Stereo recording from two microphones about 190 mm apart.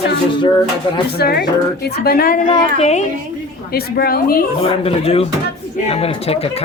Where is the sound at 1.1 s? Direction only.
55° left (ahead or behind).